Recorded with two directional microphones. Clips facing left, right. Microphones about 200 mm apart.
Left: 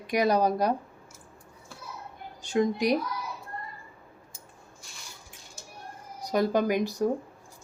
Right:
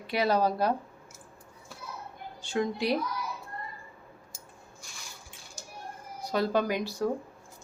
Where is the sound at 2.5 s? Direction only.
15° left (ahead or behind).